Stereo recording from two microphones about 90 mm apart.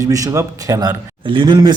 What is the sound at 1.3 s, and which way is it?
Speech, 70° right (ahead or behind).